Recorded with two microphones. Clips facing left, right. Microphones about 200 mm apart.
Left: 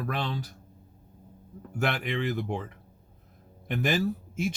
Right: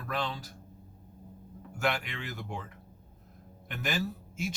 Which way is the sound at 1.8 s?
55° left (ahead or behind).